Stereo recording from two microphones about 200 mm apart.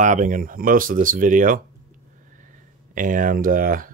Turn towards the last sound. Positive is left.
turn(degrees=-45)  # may be behind; listen again after turning